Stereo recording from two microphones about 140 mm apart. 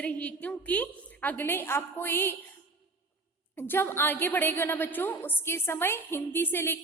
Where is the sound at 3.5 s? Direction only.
15° left (ahead or behind).